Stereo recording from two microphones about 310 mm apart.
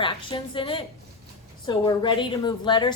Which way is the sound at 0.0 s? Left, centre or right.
Centre.